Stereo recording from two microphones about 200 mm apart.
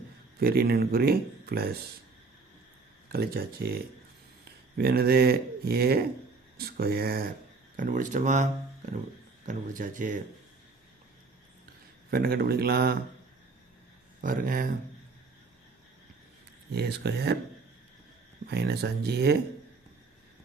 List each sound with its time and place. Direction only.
0.3 s speech: 50° right (ahead or behind)
3.1 s speech: 50° right (ahead or behind)
4.8 s speech: 50° right (ahead or behind)
9.5 s speech: 40° right (ahead or behind)
12.1 s speech: 50° right (ahead or behind)
14.2 s speech: 45° right (ahead or behind)
16.7 s speech: 55° right (ahead or behind)
18.4 s speech: 55° right (ahead or behind)